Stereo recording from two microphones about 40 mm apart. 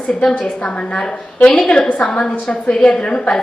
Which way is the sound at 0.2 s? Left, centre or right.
Left.